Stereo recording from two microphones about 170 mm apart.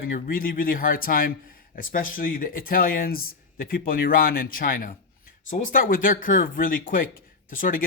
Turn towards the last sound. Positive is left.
turn(degrees=55)  # may be behind; listen again after turning